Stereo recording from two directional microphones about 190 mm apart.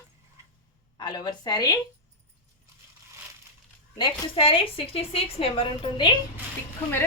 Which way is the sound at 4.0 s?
25° left (ahead or behind).